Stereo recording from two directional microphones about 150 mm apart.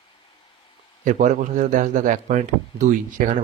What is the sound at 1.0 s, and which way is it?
Speech, 55° right (ahead or behind).